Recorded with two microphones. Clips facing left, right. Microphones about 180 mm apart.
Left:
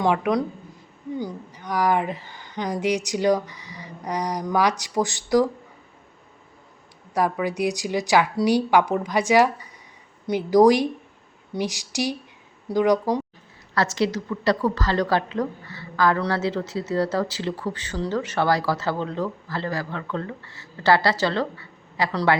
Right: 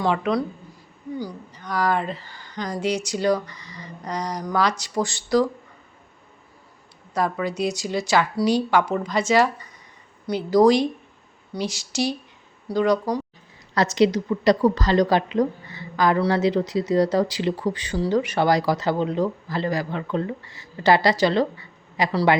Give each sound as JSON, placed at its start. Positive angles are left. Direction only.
{"t": 0.0, "sound": "a woman's voice", "side_deg": 15}
{"t": 7.1, "sound": "a woman's voice", "side_deg": 10}
{"t": 13.7, "sound": "a woman's voice", "side_deg": -20}